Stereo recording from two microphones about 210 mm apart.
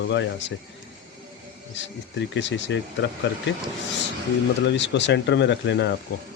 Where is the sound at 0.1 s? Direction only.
60° left (ahead or behind).